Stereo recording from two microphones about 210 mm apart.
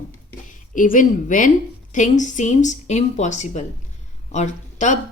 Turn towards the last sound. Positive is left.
turn(degrees=35)  # may be behind; listen again after turning